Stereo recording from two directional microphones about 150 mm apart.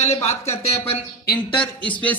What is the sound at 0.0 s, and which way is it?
Speech, 45° left (ahead or behind).